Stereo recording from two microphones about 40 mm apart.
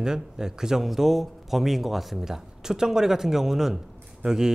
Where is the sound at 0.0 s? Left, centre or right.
Centre.